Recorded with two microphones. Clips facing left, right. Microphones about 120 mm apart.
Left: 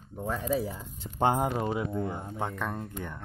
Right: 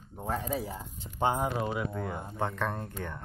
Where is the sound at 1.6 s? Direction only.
30° left (ahead or behind).